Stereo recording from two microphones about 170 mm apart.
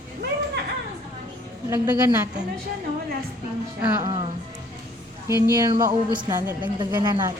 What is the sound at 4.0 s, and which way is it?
Speech, 25° right (ahead or behind).